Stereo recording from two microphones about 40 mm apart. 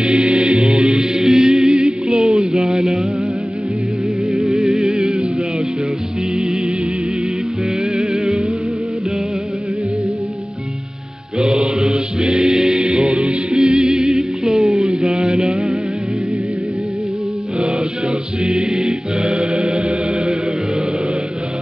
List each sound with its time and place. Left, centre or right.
0.0 s music: right
4.3 s music: centre
8.0 s music: centre
11.3 s music: centre
18.4 s mantra: centre